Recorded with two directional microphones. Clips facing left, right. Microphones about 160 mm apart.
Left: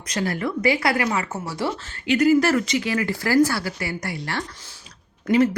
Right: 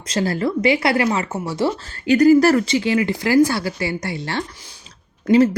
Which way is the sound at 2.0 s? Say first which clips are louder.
Right 5 dB; 40° right (ahead or behind).